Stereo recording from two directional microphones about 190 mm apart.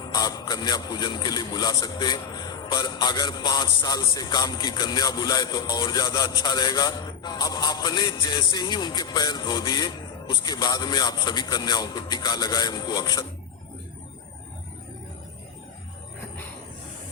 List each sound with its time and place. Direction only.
0.1 s a man's voice: 20° left (ahead or behind)